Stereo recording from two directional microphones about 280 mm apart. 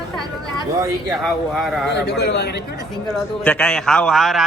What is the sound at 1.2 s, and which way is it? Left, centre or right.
Speech, centre.